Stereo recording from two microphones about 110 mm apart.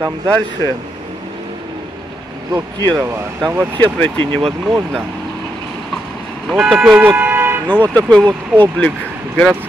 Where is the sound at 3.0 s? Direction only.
25° right (ahead or behind).